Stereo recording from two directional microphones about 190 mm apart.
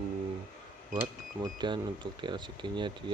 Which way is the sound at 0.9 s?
20° right (ahead or behind).